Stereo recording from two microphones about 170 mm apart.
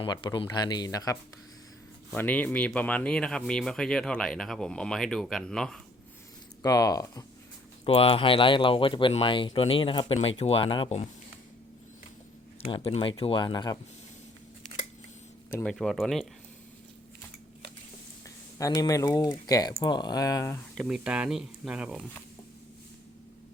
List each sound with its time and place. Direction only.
0.0 s speech: 25° left (ahead or behind); by 5.8 s 5° left (ahead or behind)
6.6 s speech: 20° left (ahead or behind)
7.9 s speech: 35° left (ahead or behind)
12.6 s speech: 30° left (ahead or behind)
15.6 s speech: centre (ahead or behind)
18.5 s speech: 20° left (ahead or behind)
20.7 s speech: 5° right (ahead or behind)